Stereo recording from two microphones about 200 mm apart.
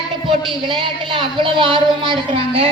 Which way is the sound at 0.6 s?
25° right (ahead or behind).